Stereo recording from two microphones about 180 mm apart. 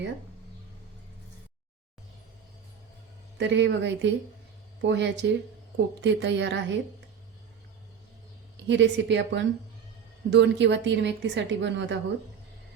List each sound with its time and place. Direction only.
3.3 s a woman's voice: 80° right
8.6 s a woman's voice: 80° right